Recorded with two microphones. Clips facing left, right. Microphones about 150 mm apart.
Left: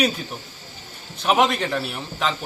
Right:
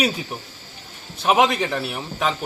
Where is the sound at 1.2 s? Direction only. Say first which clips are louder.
Right 1 dB; centre (ahead or behind).